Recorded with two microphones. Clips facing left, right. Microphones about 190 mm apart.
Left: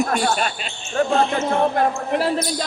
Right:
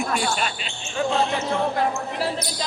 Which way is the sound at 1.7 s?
55° left (ahead or behind).